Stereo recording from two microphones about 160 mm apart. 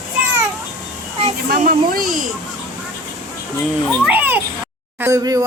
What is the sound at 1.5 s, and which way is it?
Speech, 70° right (ahead or behind).